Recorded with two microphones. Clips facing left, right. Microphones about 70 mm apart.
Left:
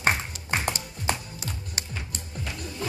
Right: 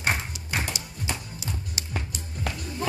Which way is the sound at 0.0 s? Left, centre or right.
Left.